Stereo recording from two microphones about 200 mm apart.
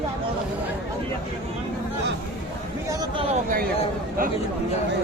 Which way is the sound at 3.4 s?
45° right (ahead or behind).